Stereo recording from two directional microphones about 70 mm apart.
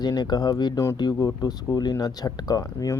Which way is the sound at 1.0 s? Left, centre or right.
Left.